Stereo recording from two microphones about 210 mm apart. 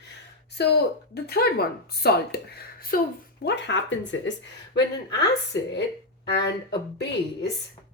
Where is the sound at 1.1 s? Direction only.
50° left (ahead or behind).